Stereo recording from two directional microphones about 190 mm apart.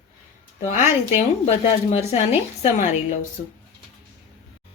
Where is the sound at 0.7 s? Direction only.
40° left (ahead or behind).